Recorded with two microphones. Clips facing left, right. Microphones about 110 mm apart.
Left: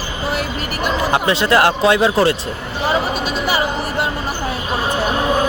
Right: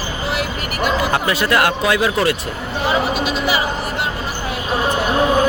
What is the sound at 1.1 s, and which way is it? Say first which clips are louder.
Speech: left 2 dB; 25° left (ahead or behind).